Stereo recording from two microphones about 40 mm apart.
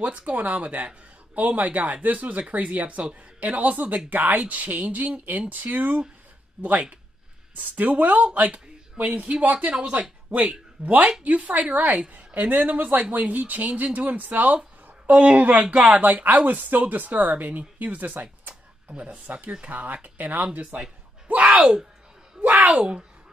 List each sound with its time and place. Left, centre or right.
0.0 s speech: right
4.1 s speech: right
4.4 s speech: right
9.8 s speech: right
10.3 s speech: right
15.9 s speech: right
18.9 s speech: right
19.6 s speech: right
21.3 s a sound: right
22.4 s speech: right
22.8 s speech: right